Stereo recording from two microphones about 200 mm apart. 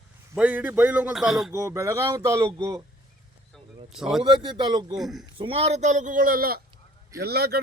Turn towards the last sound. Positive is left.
turn(degrees=-50)  # may be behind; listen again after turning